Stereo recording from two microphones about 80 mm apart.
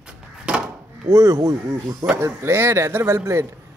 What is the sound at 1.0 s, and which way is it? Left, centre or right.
Speech, right.